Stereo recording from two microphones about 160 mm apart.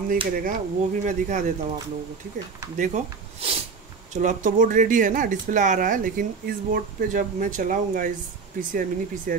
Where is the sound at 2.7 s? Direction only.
55° right (ahead or behind).